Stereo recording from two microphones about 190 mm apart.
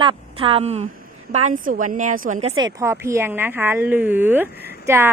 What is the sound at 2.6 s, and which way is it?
A woman's voice, 20° right (ahead or behind).